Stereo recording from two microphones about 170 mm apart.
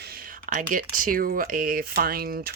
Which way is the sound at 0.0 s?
60° right (ahead or behind).